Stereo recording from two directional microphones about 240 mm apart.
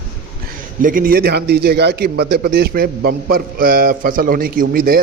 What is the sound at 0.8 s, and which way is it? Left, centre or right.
A man's voice, right.